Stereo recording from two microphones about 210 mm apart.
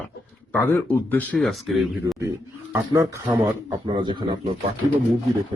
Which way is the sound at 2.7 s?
15° right (ahead or behind).